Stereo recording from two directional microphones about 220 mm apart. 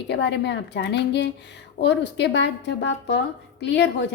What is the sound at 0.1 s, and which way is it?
A woman's voice, 50° left (ahead or behind).